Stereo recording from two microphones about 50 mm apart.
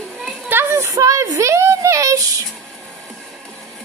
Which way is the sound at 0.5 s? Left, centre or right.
Right.